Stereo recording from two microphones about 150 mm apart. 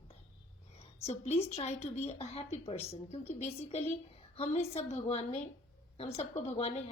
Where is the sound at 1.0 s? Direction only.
45° left (ahead or behind).